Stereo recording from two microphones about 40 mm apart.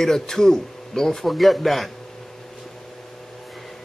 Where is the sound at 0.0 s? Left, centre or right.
Centre.